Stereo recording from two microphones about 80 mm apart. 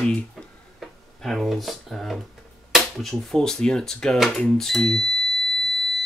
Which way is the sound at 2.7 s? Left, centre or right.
Centre.